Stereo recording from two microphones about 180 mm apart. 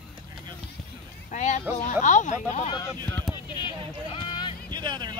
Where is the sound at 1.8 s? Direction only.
40° left (ahead or behind).